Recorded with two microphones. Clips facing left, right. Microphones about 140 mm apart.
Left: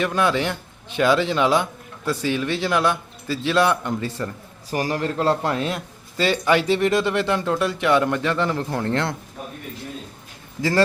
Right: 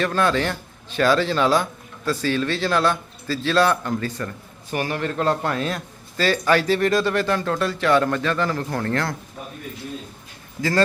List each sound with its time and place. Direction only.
0.0 s a man's voice: 15° left (ahead or behind)